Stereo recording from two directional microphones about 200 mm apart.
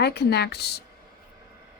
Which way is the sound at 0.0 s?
55° left (ahead or behind).